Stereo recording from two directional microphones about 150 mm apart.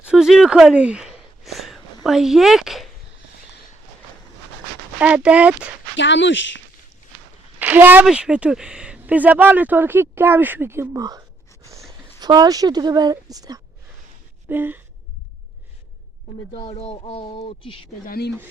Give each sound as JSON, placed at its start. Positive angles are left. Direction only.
{"t": 0.0, "sound": "a sound", "side_deg": -5}
{"t": 2.0, "sound": "speech", "side_deg": -5}
{"t": 4.9, "sound": "speech", "side_deg": -10}
{"t": 7.6, "sound": "a woman's voice", "side_deg": -10}
{"t": 14.4, "sound": "a sound", "side_deg": -15}
{"t": 16.5, "sound": "speech", "side_deg": 35}
{"t": 18.0, "sound": "speech", "side_deg": 85}